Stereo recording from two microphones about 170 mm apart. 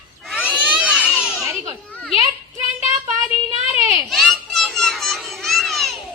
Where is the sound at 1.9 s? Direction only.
5° left (ahead or behind).